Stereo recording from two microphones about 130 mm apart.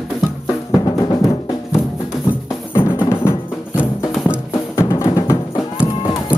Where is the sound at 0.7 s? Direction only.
25° left (ahead or behind).